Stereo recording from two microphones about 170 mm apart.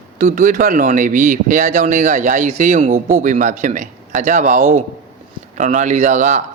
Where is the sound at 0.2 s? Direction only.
50° right (ahead or behind).